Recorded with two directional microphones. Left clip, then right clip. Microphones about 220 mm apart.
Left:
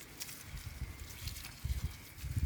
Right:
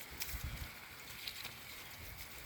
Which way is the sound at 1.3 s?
20° left (ahead or behind).